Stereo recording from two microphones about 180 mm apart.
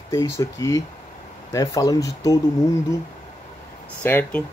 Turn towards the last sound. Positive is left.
turn(degrees=10)  # may be behind; listen again after turning